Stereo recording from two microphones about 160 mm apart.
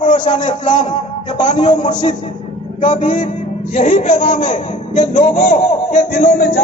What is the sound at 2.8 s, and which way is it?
Speech, 35° left (ahead or behind).